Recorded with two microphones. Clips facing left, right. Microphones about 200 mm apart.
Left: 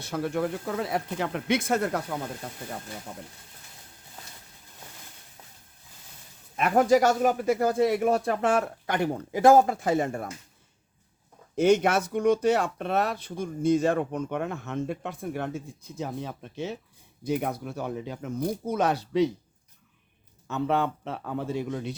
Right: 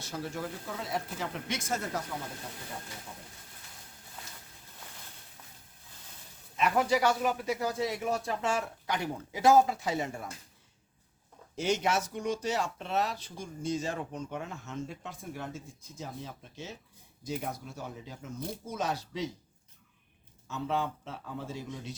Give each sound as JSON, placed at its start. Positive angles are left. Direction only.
{"t": 0.0, "sound": "speech", "side_deg": 60}
{"t": 3.1, "sound": "speech", "side_deg": 65}
{"t": 6.6, "sound": "speech", "side_deg": 50}
{"t": 11.5, "sound": "speech", "side_deg": 55}
{"t": 20.5, "sound": "speech", "side_deg": 60}